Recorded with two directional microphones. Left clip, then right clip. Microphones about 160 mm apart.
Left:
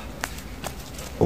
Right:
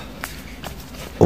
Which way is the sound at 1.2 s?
30° right (ahead or behind).